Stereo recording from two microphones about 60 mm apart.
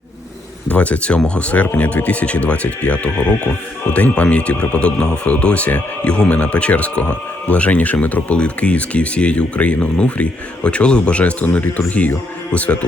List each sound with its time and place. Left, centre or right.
0.7 s speech: left